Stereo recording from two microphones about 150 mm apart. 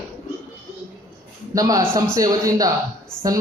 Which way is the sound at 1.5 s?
25° right (ahead or behind).